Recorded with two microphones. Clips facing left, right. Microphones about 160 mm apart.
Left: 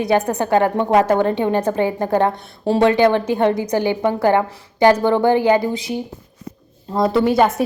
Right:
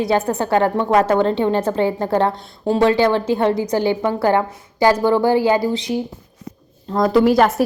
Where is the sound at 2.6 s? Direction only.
70° left (ahead or behind).